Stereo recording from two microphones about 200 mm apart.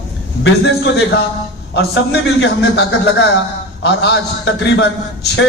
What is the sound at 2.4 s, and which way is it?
Speech, 65° left (ahead or behind).